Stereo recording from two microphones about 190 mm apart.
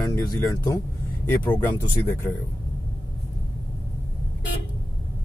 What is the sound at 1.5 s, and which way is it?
Speech, 10° left (ahead or behind).